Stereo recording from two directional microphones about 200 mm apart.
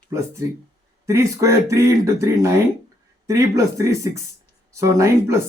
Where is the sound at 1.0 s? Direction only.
15° right (ahead or behind).